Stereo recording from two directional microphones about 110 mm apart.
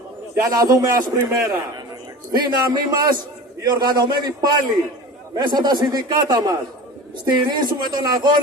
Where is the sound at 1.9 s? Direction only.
35° right (ahead or behind).